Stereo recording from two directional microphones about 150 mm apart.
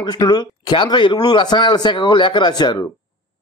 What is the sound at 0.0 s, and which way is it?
A man's voice, 30° left (ahead or behind).